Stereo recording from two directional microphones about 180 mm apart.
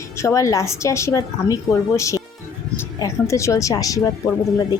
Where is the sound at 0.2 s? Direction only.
15° left (ahead or behind).